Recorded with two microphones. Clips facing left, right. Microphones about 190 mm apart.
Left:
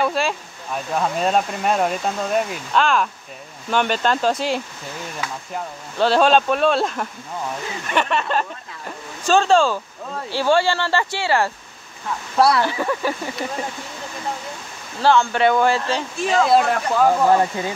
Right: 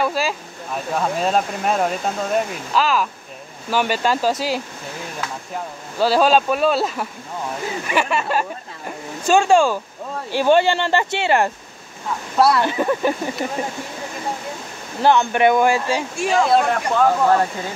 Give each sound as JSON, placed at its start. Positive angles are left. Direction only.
{"t": 0.0, "sound": "speech", "side_deg": 0}
{"t": 5.9, "sound": "speech", "side_deg": -5}
{"t": 12.4, "sound": "speech", "side_deg": 0}
{"t": 12.6, "sound": "speech", "side_deg": -20}
{"t": 15.0, "sound": "speech", "side_deg": -20}
{"t": 16.3, "sound": "speech", "side_deg": 0}